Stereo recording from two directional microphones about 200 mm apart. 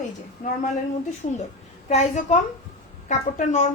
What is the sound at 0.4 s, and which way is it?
Speech, 40° left (ahead or behind).